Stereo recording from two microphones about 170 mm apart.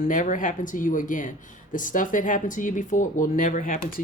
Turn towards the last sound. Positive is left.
turn(degrees=55)  # may be behind; listen again after turning